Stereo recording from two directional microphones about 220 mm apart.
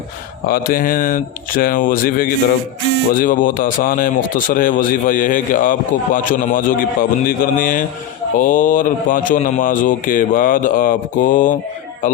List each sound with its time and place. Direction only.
0.4 s speech: 40° left (ahead or behind)